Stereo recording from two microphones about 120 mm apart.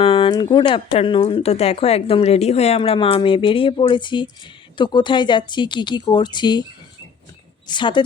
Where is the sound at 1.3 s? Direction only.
55° left (ahead or behind); by 6.6 s 40° left (ahead or behind).